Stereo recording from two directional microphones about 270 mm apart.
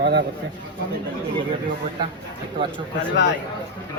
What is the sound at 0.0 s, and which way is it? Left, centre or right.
Speech, right.